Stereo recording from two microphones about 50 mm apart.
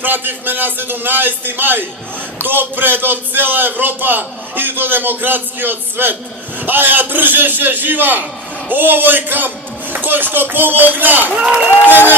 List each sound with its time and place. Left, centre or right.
0.0 s a man's voice: right
11.4 s speech: right
11.8 s a man's voice: right